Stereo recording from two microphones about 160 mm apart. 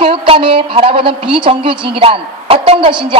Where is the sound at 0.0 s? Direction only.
35° right (ahead or behind).